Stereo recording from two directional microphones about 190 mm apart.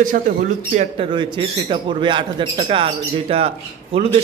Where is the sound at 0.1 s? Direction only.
45° right (ahead or behind).